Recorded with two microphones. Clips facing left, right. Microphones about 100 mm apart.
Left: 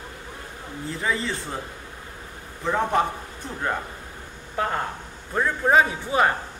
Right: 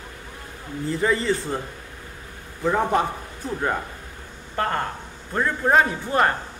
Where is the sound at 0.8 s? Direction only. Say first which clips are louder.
Right 5 dB; centre (ahead or behind).